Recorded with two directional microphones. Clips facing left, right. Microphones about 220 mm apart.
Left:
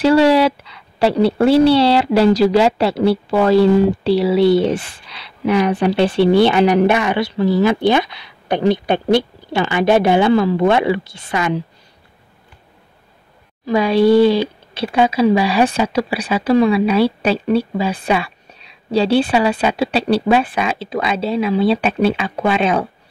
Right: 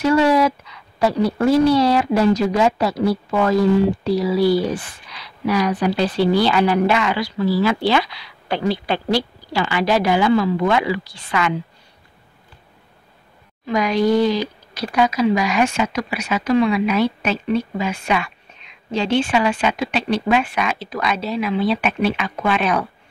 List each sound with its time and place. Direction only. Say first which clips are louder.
0.0 s a sound: left 4 dB; 30° left (ahead or behind)
1.2 s speech: left 4 dB; 30° left (ahead or behind)
13.7 s speech: left 5 dB; 30° left (ahead or behind)